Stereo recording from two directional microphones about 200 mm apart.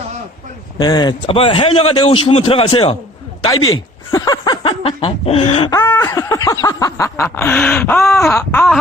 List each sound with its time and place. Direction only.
0.8 s a man's voice: 20° left (ahead or behind)
4.1 s a sound: 20° left (ahead or behind); by 8.4 s 5° left (ahead or behind)
8.4 s wail: 5° left (ahead or behind)